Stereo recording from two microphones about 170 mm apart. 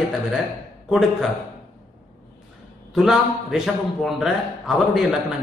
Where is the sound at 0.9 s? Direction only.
Centre (ahead or behind).